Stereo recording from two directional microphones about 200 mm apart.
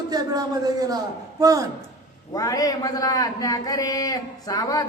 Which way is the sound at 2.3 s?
15° left (ahead or behind).